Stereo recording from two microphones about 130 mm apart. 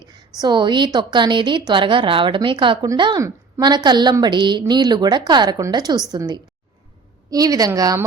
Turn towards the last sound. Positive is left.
turn(degrees=-30)  # may be behind; listen again after turning